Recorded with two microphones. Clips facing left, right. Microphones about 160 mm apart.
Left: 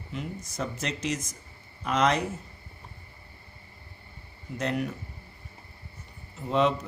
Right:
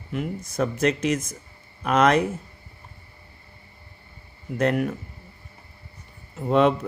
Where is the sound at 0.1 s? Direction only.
55° right (ahead or behind).